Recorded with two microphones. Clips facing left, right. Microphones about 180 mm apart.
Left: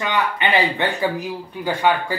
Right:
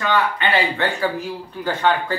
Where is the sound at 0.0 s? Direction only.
15° left (ahead or behind).